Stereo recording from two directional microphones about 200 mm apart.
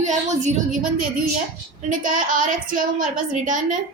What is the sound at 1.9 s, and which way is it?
A woman's voice, 40° right (ahead or behind).